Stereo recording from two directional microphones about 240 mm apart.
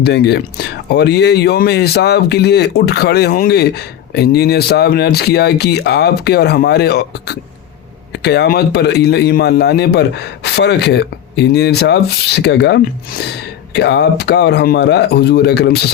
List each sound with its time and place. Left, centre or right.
0.0 s speech: left